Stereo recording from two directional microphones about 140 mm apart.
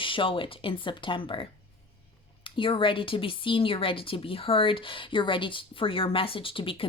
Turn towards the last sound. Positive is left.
turn(degrees=40)  # may be behind; listen again after turning